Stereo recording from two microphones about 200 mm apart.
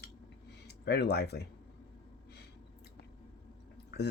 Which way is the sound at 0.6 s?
55° left (ahead or behind).